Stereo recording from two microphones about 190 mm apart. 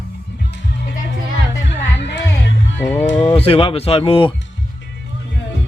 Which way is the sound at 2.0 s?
65° left (ahead or behind).